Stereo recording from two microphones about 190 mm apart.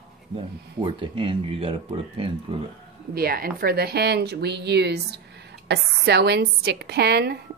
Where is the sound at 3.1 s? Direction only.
50° right (ahead or behind).